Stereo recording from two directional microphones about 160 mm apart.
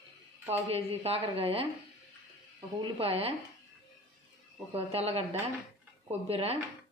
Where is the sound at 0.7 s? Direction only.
40° right (ahead or behind).